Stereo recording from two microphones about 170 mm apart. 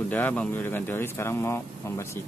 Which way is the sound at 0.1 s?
10° left (ahead or behind).